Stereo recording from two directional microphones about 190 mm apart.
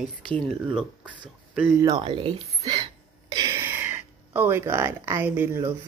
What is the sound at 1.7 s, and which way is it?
A woman's voice, 20° right (ahead or behind).